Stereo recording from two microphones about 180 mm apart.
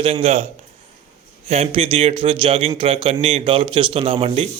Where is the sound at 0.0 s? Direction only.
35° right (ahead or behind).